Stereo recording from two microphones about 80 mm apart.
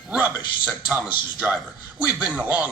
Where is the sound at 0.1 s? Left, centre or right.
Centre.